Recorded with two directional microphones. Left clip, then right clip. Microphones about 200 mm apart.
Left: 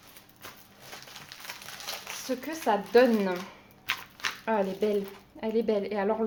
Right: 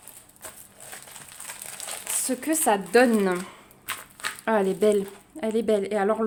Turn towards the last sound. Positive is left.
turn(degrees=-45)  # may be behind; listen again after turning